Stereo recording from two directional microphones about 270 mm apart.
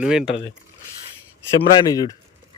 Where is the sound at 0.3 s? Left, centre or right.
Left.